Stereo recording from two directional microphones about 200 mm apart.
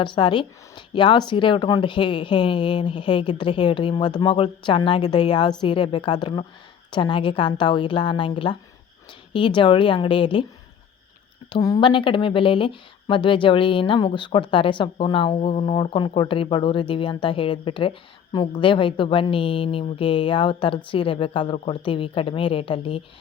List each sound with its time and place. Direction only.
0.0 s speech: 25° left (ahead or behind)
11.5 s speech: 20° left (ahead or behind)